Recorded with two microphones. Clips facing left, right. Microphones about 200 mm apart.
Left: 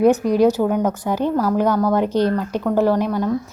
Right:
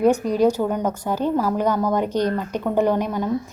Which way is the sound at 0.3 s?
10° left (ahead or behind).